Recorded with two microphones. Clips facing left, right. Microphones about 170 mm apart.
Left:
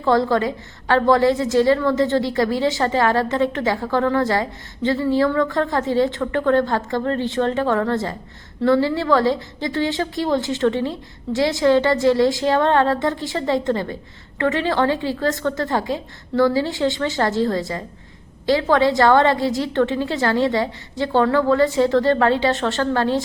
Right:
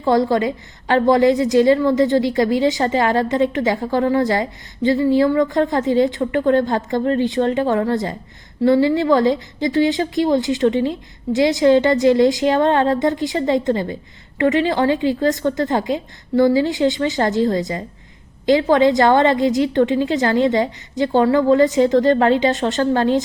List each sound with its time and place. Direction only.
0.0 s a woman's voice: 15° right (ahead or behind)